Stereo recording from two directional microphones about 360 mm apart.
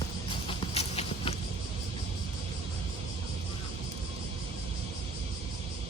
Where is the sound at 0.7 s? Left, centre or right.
Centre.